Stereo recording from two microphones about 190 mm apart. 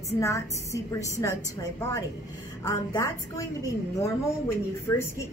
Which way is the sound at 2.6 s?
20° left (ahead or behind).